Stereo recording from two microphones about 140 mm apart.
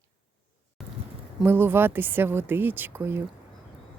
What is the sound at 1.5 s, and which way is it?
Speech, 15° right (ahead or behind).